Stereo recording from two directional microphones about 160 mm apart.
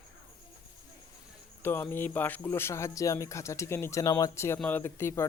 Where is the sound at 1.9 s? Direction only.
10° left (ahead or behind).